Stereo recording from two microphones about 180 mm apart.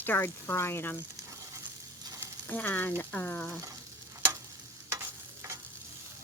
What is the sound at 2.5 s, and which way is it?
Speech, 10° left (ahead or behind).